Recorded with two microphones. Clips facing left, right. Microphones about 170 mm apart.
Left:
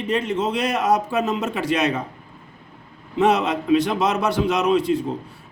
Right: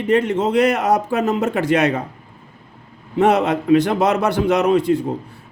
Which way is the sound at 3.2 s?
55° right (ahead or behind).